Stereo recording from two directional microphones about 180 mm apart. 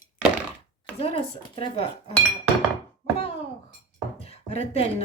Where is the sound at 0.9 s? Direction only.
30° left (ahead or behind).